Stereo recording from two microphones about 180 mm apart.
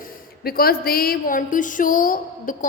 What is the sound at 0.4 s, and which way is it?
A woman's voice, 55° left (ahead or behind).